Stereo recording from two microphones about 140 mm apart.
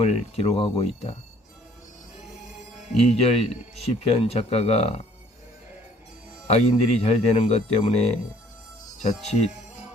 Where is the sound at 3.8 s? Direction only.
45° left (ahead or behind).